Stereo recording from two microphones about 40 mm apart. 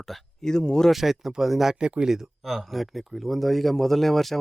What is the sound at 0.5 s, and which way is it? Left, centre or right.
Speech, centre.